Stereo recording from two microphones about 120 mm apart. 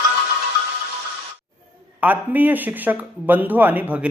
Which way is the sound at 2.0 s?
15° right (ahead or behind).